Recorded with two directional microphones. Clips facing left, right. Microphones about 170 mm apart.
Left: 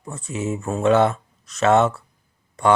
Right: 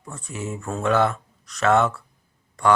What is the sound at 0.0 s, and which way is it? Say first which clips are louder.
Speech: left 5 dB; 20° left (ahead or behind).